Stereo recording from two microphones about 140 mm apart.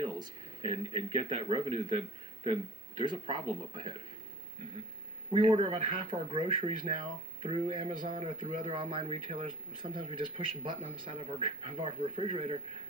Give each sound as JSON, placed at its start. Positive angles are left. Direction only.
{"t": 0.0, "sound": "a man's voice", "side_deg": -40}
{"t": 3.0, "sound": "speech", "side_deg": -35}
{"t": 5.3, "sound": "speech", "side_deg": -35}